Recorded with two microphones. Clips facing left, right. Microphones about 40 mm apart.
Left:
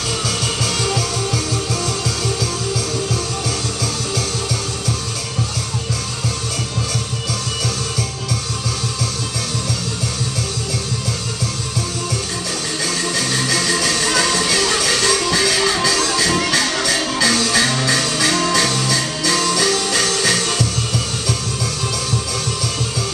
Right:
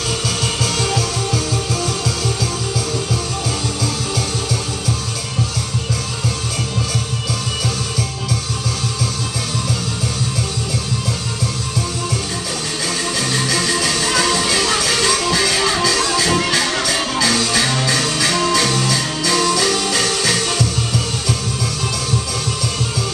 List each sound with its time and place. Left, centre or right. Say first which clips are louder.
0.8 s music: right 1 dB; centre
13.3 s music: right 1 dB; centre